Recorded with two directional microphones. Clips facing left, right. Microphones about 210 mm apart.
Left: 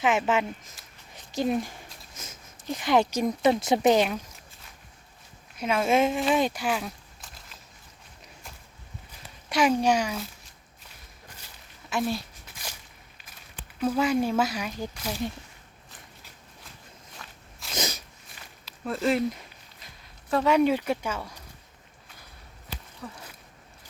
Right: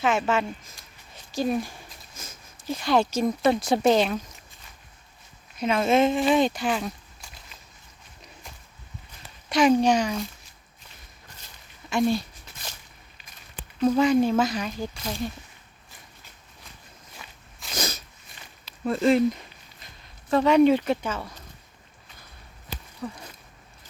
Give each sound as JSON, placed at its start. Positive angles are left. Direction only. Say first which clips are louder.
{"t": 0.0, "sound": "speech", "louder": "even", "side_deg": 15}
{"t": 1.1, "sound": "a sound", "louder": "right 1 dB", "side_deg": 20}
{"t": 2.7, "sound": "speech", "louder": "even", "side_deg": 20}
{"t": 5.5, "sound": "speech", "louder": "right 2 dB", "side_deg": 5}
{"t": 9.5, "sound": "speech", "louder": "right 3 dB", "side_deg": 10}
{"t": 11.3, "sound": "a sound", "louder": "even", "side_deg": 5}
{"t": 13.3, "sound": "speech", "louder": "right 3 dB", "side_deg": 5}
{"t": 17.2, "sound": "walk", "louder": "right 1 dB", "side_deg": 0}
{"t": 17.7, "sound": "sneeze", "louder": "even", "side_deg": 15}
{"t": 18.6, "sound": "speech", "louder": "right 5 dB", "side_deg": 5}